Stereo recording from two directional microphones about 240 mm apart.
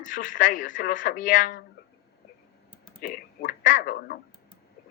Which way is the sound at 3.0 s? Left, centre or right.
Left.